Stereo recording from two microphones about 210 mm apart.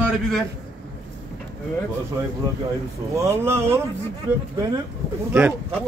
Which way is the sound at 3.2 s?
15° right (ahead or behind).